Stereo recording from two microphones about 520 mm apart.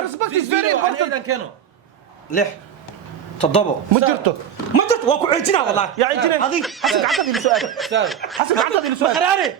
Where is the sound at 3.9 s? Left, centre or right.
Right.